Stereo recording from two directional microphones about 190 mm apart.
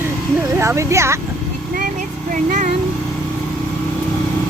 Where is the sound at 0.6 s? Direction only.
15° right (ahead or behind).